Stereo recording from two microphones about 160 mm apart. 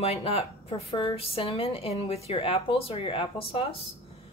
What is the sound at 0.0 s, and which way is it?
A woman's voice, 40° left (ahead or behind).